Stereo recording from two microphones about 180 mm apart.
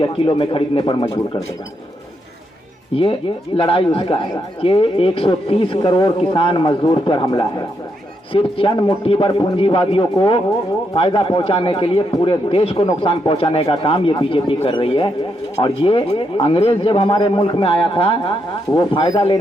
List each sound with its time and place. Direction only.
0.0 s speech: 30° left (ahead or behind)
2.9 s speech: 30° left (ahead or behind)